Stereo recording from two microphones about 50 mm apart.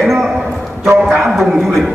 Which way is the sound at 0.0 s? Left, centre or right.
Centre.